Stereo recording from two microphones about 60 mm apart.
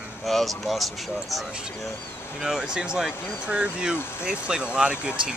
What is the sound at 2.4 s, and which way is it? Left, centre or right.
Speech, centre.